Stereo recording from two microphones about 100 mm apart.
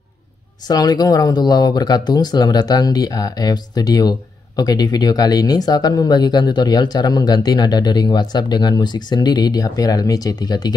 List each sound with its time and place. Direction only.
0.7 s speech: 40° left (ahead or behind)